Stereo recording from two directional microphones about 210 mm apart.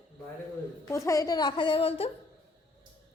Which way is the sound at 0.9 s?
15° left (ahead or behind).